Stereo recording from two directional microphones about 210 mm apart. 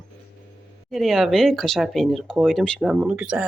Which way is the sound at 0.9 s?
Centre (ahead or behind).